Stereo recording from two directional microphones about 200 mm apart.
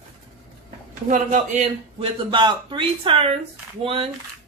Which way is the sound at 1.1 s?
35° right (ahead or behind).